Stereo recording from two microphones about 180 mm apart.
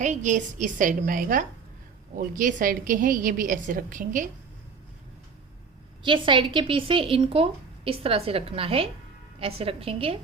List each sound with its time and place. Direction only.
0.0 s a woman's voice: 40° right (ahead or behind)
6.0 s a woman's voice: 25° right (ahead or behind)